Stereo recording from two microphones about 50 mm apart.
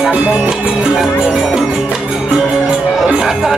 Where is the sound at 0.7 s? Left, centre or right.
Centre.